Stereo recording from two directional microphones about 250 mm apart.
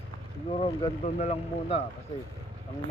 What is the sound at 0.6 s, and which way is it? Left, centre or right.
Speech, left.